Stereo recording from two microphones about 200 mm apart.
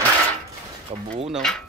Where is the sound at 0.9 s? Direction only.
30° right (ahead or behind).